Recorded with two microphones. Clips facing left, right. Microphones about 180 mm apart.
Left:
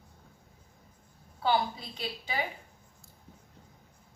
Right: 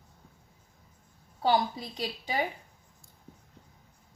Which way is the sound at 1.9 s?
40° right (ahead or behind).